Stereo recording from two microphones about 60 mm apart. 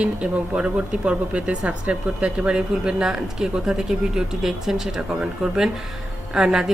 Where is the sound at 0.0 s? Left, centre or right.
Centre.